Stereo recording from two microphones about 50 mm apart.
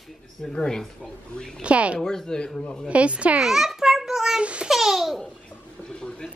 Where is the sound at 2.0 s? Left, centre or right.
Centre.